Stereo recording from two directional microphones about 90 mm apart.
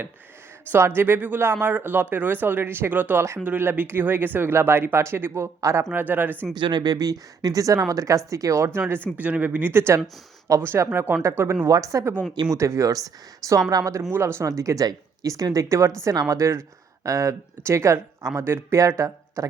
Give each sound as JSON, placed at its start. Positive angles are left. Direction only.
{"t": 0.7, "sound": "speech", "side_deg": -25}
{"t": 5.9, "sound": "speech", "side_deg": -20}
{"t": 6.6, "sound": "speech", "side_deg": -55}
{"t": 9.1, "sound": "speech", "side_deg": -15}